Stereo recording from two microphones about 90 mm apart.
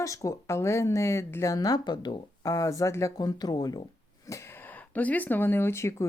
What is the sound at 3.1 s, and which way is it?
Speech, 45° left (ahead or behind).